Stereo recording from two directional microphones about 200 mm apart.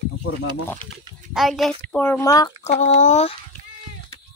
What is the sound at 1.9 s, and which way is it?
Speech, 10° left (ahead or behind).